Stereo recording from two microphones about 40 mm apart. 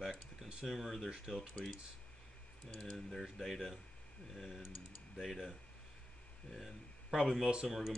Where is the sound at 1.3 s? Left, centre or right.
Centre.